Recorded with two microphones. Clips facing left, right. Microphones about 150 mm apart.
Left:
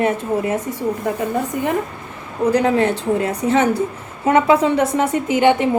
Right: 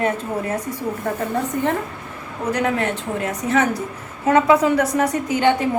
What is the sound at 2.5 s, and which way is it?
A woman's voice, 30° left (ahead or behind).